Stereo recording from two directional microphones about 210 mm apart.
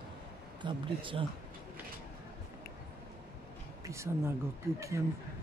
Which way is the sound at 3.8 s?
15° right (ahead or behind).